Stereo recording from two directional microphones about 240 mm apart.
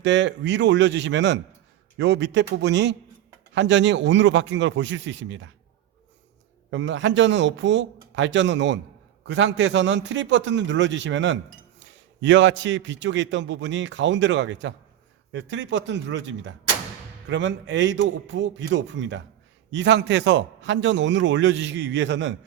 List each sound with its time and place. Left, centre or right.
0.0 s a man's voice: right
6.7 s a man's voice: right